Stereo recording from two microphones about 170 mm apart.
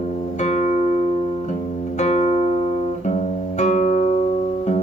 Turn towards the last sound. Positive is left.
turn(degrees=40)  # may be behind; listen again after turning